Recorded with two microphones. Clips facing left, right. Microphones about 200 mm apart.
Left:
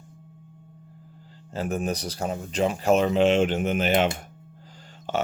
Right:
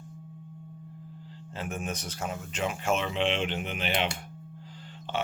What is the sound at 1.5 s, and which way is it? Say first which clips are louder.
Speech: left 8 dB; 40° left (ahead or behind).